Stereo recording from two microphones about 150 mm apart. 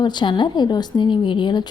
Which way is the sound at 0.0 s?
30° left (ahead or behind).